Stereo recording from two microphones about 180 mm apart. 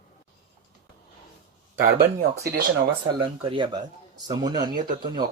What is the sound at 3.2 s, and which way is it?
Speech, 30° right (ahead or behind).